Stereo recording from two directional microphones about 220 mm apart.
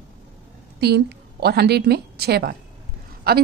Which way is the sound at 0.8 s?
45° right (ahead or behind).